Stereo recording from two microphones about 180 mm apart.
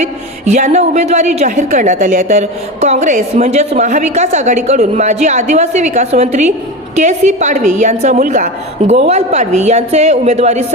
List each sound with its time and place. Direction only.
0.0 s a woman's voice: 40° right (ahead or behind)